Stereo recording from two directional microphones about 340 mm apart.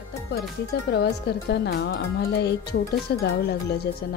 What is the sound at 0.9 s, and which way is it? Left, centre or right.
Speech, left.